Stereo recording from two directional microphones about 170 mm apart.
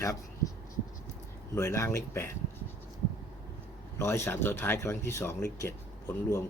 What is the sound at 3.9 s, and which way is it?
Speech, 15° left (ahead or behind).